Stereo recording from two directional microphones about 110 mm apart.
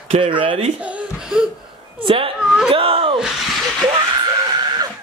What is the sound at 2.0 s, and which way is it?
Speech, 55° right (ahead or behind).